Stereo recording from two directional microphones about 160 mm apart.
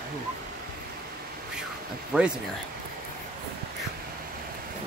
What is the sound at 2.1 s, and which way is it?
Speech, 10° right (ahead or behind).